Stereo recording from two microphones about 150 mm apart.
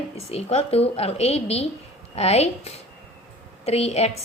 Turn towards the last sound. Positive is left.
turn(degrees=45)  # may be behind; listen again after turning